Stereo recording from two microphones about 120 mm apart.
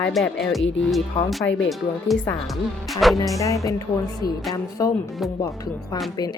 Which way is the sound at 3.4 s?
25° left (ahead or behind).